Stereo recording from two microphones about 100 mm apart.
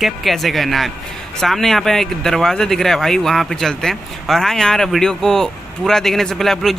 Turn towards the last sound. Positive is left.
turn(degrees=5)  # may be behind; listen again after turning